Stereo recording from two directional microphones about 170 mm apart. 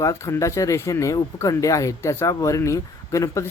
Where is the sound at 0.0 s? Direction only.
15° left (ahead or behind).